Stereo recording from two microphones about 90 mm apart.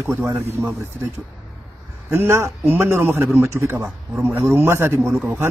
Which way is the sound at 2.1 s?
30° right (ahead or behind).